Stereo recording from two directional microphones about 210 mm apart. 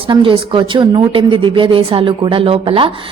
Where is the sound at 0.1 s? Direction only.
25° right (ahead or behind).